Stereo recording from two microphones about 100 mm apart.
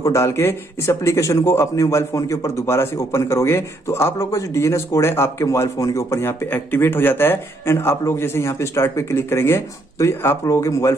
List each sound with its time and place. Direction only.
0.0 s speech: 30° left (ahead or behind)